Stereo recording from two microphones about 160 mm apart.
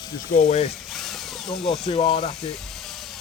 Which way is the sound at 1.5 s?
40° left (ahead or behind).